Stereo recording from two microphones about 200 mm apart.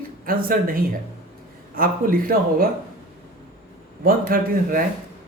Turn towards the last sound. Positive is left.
turn(degrees=-45)  # may be behind; listen again after turning